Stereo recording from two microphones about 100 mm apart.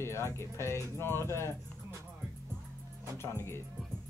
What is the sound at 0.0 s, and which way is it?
Speech, 25° left (ahead or behind).